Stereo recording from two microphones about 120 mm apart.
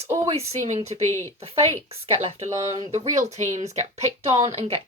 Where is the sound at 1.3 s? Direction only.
55° right (ahead or behind).